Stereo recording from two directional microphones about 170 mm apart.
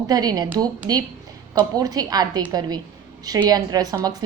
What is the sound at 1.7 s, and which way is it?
Speech, 20° right (ahead or behind).